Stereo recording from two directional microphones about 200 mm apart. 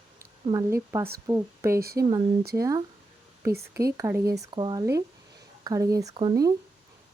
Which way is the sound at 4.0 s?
15° right (ahead or behind).